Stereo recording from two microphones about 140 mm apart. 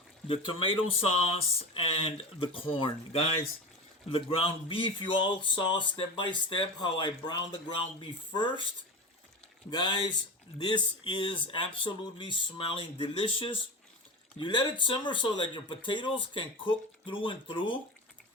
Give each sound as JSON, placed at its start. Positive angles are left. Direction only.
{"t": 0.3, "sound": "speech", "side_deg": 40}
{"t": 9.6, "sound": "speech", "side_deg": 30}